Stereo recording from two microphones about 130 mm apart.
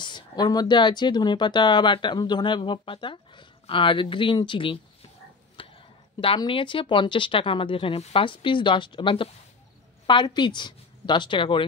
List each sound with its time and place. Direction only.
0.0 s speech: 35° left (ahead or behind)
5.6 s a sound: 40° left (ahead or behind)
6.2 s speech: 40° left (ahead or behind)